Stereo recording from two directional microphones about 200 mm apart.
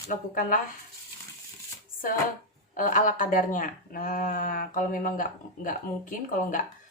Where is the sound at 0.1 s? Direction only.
40° left (ahead or behind).